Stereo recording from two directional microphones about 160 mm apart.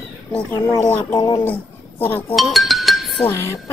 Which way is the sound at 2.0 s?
10° left (ahead or behind).